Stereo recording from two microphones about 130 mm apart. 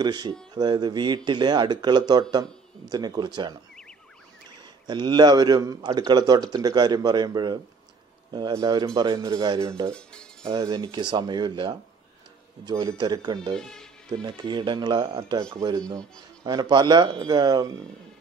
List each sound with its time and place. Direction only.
0.0 s a man's voice: 35° right (ahead or behind)
4.8 s a man's voice: 35° right (ahead or behind)
9.8 s speech: 5° left (ahead or behind)
10.4 s a man's voice: 30° right (ahead or behind)
13.6 s speech: 5° left (ahead or behind)
14.1 s a man's voice: 35° right (ahead or behind)